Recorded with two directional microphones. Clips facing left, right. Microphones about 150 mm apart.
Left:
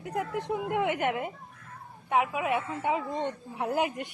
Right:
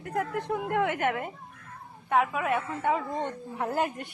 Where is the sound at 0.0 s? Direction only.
5° left (ahead or behind).